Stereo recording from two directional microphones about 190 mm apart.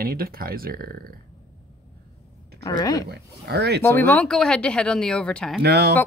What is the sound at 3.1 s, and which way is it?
Speech, 60° right (ahead or behind).